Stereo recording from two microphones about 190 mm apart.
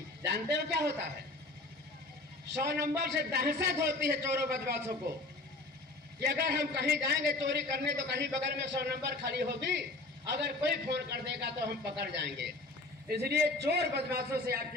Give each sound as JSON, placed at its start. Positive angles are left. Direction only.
{"t": 0.3, "sound": "a man's voice", "side_deg": -60}
{"t": 2.5, "sound": "a man's voice", "side_deg": -60}
{"t": 6.1, "sound": "a man's voice", "side_deg": -60}